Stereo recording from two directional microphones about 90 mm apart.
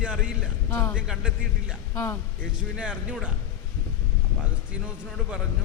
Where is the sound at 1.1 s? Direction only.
10° right (ahead or behind).